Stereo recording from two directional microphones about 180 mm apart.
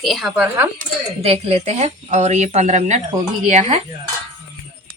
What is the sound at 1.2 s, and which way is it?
Speech, 35° right (ahead or behind).